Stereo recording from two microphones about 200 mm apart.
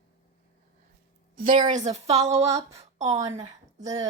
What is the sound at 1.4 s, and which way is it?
A woman's voice, 40° right (ahead or behind).